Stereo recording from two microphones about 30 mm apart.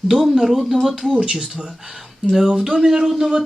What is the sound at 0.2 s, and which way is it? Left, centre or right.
Speech, centre.